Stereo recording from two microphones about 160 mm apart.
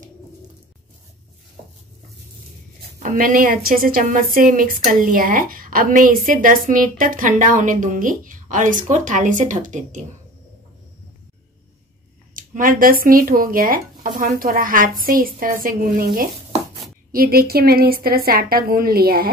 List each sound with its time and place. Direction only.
3.0 s a woman's voice: 55° right (ahead or behind)
12.4 s a woman's voice: 60° right (ahead or behind)